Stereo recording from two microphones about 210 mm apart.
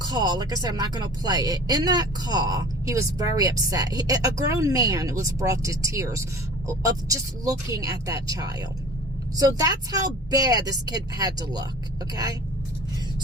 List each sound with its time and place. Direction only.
0.1 s speech: 20° right (ahead or behind)
9.9 s speech: 15° right (ahead or behind)